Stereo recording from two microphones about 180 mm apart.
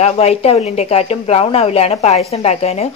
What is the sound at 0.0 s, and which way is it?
Speech, 35° left (ahead or behind).